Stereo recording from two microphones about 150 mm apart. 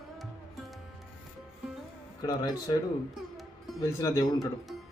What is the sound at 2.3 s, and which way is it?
Speech, 25° left (ahead or behind).